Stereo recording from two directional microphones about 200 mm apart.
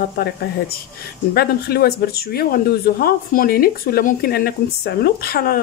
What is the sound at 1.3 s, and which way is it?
Speech, 50° left (ahead or behind).